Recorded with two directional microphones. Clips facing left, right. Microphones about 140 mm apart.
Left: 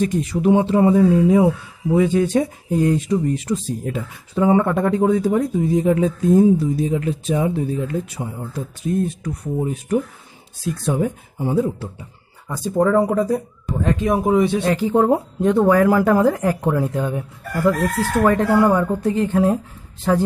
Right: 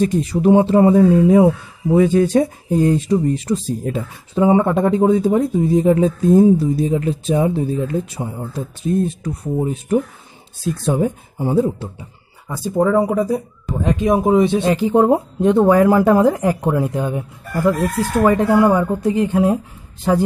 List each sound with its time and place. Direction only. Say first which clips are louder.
0.0 s speech: right 3 dB; 35° right (ahead or behind)
4.4 s speech: right 2 dB; 20° right (ahead or behind)
12.4 s speech: right 1 dB; 5° right (ahead or behind)
18.5 s speech: right 2 dB; 10° right (ahead or behind)